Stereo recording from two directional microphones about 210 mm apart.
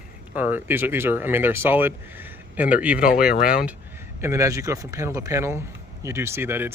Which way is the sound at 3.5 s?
5° right (ahead or behind).